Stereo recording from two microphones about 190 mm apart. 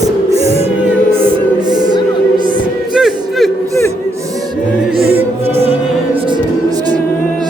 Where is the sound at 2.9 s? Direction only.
Centre (ahead or behind).